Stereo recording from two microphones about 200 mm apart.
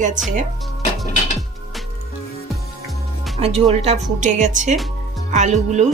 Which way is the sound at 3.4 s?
30° right (ahead or behind).